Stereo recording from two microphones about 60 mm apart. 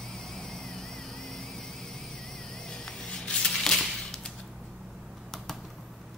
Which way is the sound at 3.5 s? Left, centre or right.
Centre.